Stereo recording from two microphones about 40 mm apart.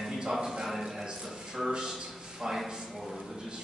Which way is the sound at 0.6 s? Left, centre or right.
Centre.